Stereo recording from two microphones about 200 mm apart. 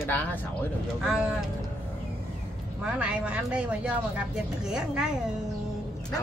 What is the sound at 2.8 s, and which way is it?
Speech, 5° right (ahead or behind).